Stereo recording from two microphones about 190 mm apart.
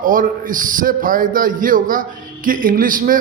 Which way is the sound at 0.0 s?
45° right (ahead or behind).